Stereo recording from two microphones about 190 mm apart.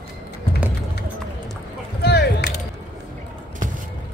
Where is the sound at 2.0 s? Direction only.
60° left (ahead or behind).